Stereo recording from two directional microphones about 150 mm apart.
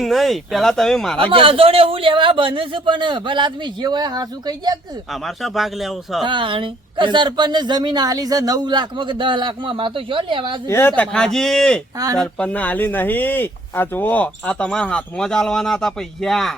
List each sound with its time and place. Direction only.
0.0 s speech: centre (ahead or behind)
1.3 s a woman's voice: 35° right (ahead or behind)
5.2 s speech: centre (ahead or behind)
6.2 s a woman's voice: 35° right (ahead or behind)
10.7 s speech: 15° left (ahead or behind)
11.9 s speech: 25° right (ahead or behind)
12.2 s speech: 10° left (ahead or behind)